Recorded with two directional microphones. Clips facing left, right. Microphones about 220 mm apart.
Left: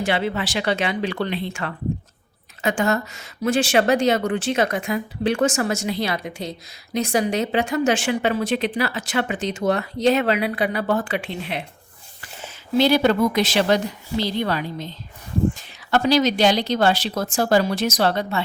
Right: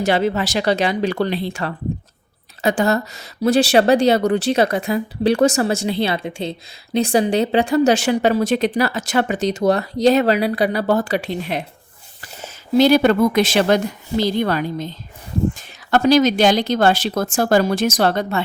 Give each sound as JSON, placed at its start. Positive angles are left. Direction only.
{"t": 0.0, "sound": "a woman's voice", "side_deg": -40}